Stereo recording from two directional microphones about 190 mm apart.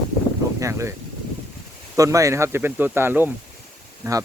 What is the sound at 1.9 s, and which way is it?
Speech, 15° right (ahead or behind).